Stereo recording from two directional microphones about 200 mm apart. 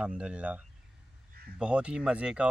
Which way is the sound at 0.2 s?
5° right (ahead or behind).